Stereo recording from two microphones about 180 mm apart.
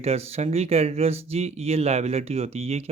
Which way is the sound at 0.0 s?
35° right (ahead or behind).